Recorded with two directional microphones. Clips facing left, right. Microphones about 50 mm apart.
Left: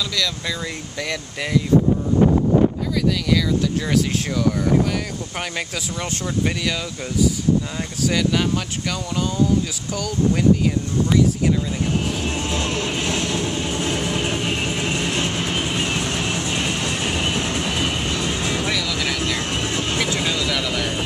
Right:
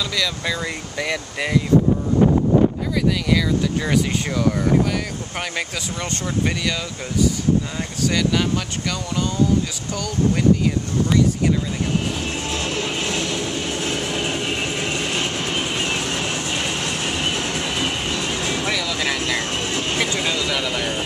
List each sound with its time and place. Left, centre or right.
0.1 s speech: centre
3.3 s speech: centre
8.1 s speech: centre
9.9 s speech: centre
12.3 s music: centre
13.4 s vehicle: left
15.0 s train: centre
16.6 s vehicle: centre
16.9 s train: centre
18.2 s music: right
18.7 s vehicle: centre
19.4 s vehicle: centre
19.7 s vehicle: centre
20.2 s speech: centre